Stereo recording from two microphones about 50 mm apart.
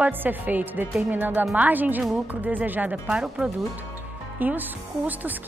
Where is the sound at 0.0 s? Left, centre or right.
Right.